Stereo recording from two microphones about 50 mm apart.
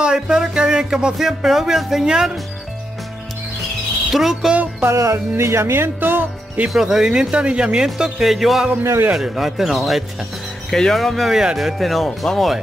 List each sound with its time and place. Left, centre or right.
0.0 s music: centre
1.1 s speech: centre
4.1 s speech: centre
4.8 s music: right
5.4 s speech: right
6.7 s speech: centre
8.2 s speech: centre